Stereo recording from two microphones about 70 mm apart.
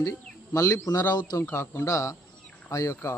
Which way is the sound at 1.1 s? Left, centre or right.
Left.